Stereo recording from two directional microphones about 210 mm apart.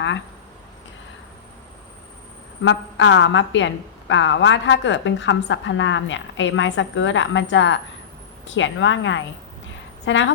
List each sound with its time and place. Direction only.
2.6 s a woman's voice: 65° left (ahead or behind)